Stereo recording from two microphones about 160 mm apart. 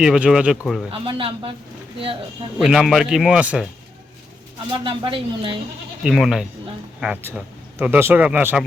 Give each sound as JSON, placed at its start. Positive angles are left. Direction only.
{"t": 0.0, "sound": "a man's voice", "side_deg": -5}
{"t": 0.9, "sound": "speech", "side_deg": -35}
{"t": 2.6, "sound": "a man's voice", "side_deg": 0}
{"t": 4.7, "sound": "speech", "side_deg": -30}
{"t": 6.0, "sound": "a man's voice", "side_deg": 0}